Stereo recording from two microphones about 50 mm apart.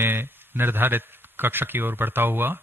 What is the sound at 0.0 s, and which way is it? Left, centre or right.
A man's voice, right.